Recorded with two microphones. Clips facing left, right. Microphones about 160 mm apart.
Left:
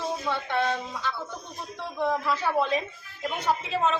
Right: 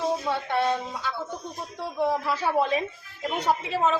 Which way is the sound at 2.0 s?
10° right (ahead or behind).